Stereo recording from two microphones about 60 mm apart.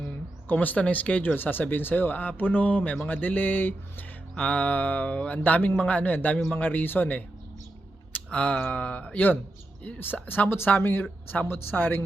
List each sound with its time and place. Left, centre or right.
0.0 s speech: left
8.1 s a sound: left
8.6 s speech: left
10.7 s speech: left